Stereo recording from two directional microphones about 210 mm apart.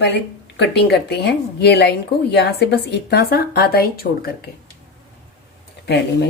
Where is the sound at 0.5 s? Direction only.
50° left (ahead or behind).